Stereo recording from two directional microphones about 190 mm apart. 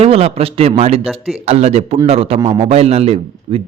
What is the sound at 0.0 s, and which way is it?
A man's voice, 30° right (ahead or behind).